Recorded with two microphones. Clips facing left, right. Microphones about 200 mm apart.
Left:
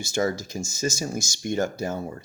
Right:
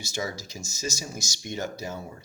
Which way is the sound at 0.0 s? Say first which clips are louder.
Left 8 dB; 50° left (ahead or behind).